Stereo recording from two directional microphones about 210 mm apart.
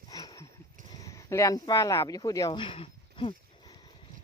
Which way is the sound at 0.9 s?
15° left (ahead or behind).